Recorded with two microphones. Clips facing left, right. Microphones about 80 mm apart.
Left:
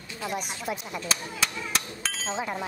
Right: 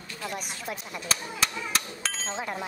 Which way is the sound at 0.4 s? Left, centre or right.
Centre.